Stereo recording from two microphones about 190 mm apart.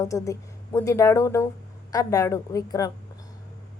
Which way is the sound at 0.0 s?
15° left (ahead or behind).